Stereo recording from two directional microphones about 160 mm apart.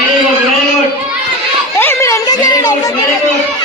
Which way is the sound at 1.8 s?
15° left (ahead or behind).